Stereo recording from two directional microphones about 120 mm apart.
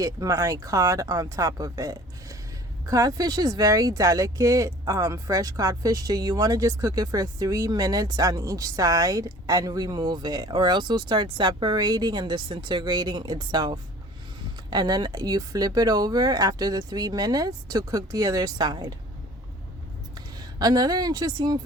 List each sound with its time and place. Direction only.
0.0 s speech: 30° right (ahead or behind)
20.1 s speech: 35° right (ahead or behind)